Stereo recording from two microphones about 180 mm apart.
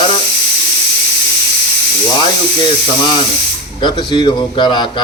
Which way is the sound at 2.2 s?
25° left (ahead or behind).